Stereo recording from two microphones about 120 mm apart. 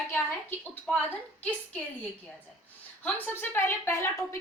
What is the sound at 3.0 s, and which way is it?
A woman's voice, 15° left (ahead or behind).